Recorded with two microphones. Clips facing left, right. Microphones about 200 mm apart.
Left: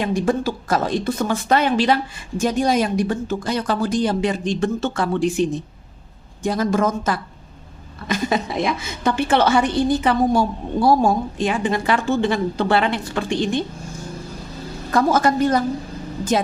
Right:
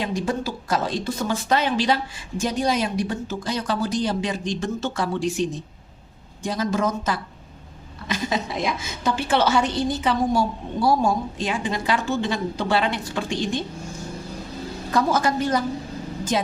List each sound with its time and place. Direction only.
0.0 s a woman's voice: 55° left (ahead or behind)
14.9 s a woman's voice: 50° left (ahead or behind)